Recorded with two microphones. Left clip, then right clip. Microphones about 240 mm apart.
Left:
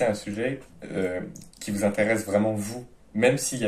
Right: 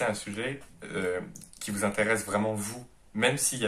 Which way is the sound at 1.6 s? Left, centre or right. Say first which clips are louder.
Left 4 dB; centre.